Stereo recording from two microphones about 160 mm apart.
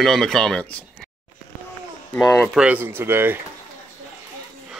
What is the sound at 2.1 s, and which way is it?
Speech, 15° left (ahead or behind).